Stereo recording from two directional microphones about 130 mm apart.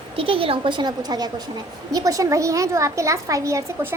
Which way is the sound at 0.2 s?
45° right (ahead or behind).